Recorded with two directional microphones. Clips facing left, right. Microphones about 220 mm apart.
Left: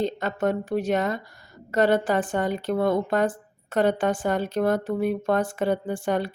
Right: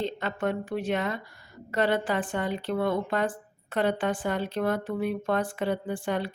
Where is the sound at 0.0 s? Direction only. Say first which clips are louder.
Left 4 dB; 40° left (ahead or behind).